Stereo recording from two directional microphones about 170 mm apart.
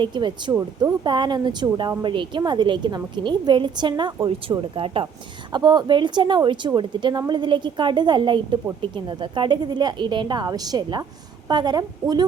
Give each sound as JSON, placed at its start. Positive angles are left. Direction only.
{"t": 0.0, "sound": "speech", "side_deg": -25}